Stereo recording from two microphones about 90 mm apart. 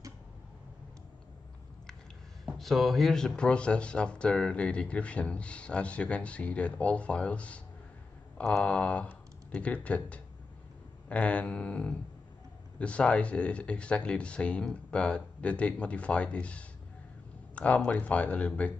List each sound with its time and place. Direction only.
2.4 s speech: centre (ahead or behind)